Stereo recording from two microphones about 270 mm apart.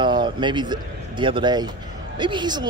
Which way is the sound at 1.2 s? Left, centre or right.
Centre.